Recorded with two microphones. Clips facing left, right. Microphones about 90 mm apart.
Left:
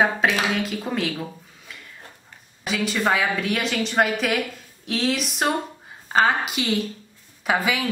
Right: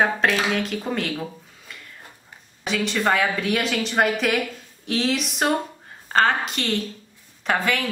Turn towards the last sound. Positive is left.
turn(degrees=5)  # may be behind; listen again after turning